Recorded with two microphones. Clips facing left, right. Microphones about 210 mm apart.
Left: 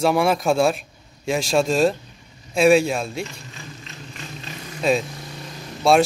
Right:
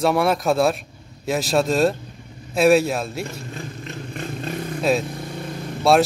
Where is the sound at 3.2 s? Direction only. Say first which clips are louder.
Right 6 dB; 55° right (ahead or behind).